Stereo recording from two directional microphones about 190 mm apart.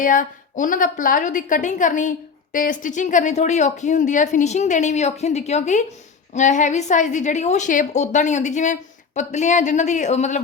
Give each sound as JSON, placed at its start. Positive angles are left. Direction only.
{"t": 0.0, "sound": "a woman's voice", "side_deg": 45}